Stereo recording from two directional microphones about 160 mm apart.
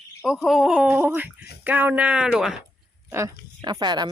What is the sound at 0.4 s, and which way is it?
Speech, centre (ahead or behind).